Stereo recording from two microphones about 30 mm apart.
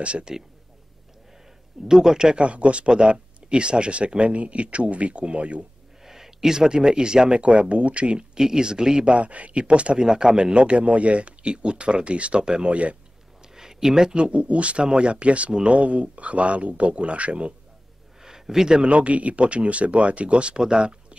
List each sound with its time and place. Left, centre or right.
0.3 s speech: centre
1.9 s speech: centre
2.3 s speech: right
6.0 s speech: centre; by 8.3 s right
8.4 s speech: right
9.1 s speech: right
9.9 s speech: right
13.6 s a sound: centre
14.1 s speech: right
18.2 s a sound: centre
18.8 s speech: right